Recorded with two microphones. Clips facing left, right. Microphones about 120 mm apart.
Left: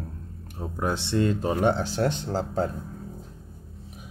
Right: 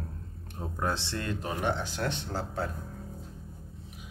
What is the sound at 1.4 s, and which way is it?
Speech, 35° left (ahead or behind).